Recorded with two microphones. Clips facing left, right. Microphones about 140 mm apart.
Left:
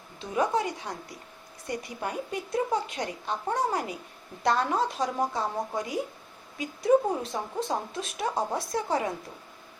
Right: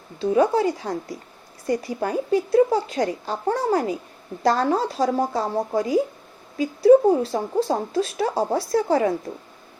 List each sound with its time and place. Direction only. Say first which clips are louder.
0.2 s a woman's voice: right 8 dB; 30° right (ahead or behind)